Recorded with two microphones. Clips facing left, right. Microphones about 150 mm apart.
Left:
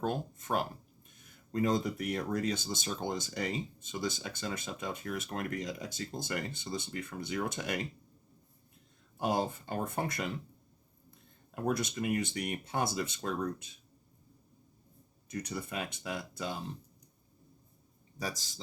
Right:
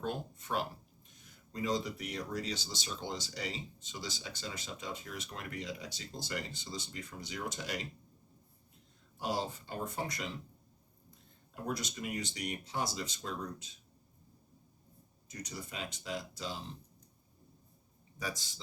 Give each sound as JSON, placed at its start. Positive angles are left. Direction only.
{"t": 0.0, "sound": "speech", "side_deg": 45}
{"t": 9.1, "sound": "speech", "side_deg": 55}
{"t": 11.5, "sound": "speech", "side_deg": 55}
{"t": 15.3, "sound": "speech", "side_deg": 60}
{"t": 18.2, "sound": "a man's voice", "side_deg": 40}